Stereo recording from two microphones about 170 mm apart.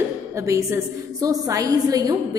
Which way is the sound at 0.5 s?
15° right (ahead or behind).